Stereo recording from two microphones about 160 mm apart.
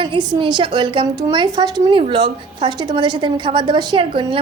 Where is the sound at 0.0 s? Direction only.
30° right (ahead or behind).